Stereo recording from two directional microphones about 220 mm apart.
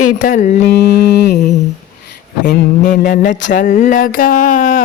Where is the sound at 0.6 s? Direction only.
50° left (ahead or behind).